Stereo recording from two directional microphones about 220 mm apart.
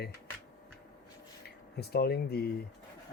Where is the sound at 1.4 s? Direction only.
45° left (ahead or behind).